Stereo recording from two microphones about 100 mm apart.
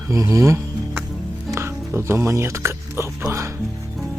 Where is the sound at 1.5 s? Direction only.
25° right (ahead or behind).